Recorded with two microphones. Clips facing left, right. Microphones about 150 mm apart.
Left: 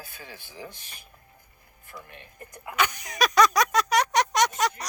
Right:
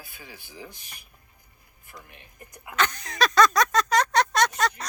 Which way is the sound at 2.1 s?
15° right (ahead or behind).